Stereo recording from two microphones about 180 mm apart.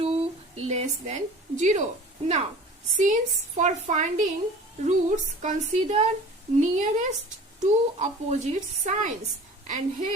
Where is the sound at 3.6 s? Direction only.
40° right (ahead or behind).